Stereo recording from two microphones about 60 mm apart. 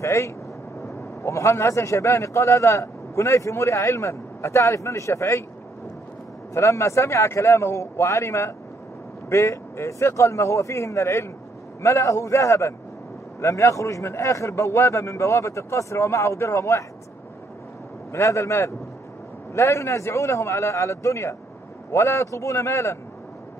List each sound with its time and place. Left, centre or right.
0.0 s a man's voice: left
6.5 s a man's voice: left
18.1 s a man's voice: left